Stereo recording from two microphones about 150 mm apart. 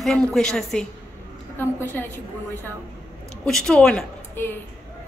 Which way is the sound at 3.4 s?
5° left (ahead or behind).